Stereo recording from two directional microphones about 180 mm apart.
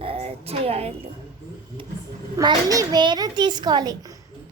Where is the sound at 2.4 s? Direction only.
20° right (ahead or behind).